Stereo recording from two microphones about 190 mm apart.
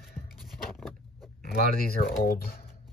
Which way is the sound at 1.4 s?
50° left (ahead or behind).